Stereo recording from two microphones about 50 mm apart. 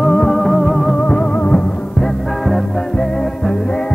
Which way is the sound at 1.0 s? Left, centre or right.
Left.